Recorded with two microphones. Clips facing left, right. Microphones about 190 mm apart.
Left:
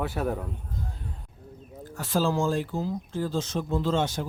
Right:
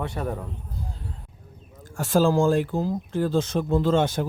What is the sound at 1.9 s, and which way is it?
Speech, 50° right (ahead or behind).